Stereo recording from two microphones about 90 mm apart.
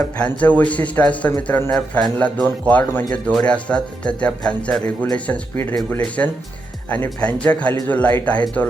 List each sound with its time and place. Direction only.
0.2 s speech: 15° left (ahead or behind)